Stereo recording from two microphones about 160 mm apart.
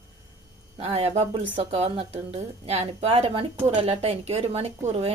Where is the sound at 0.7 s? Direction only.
40° right (ahead or behind).